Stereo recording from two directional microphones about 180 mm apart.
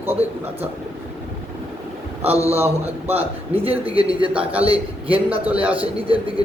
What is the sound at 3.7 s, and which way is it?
A man's voice, 30° right (ahead or behind).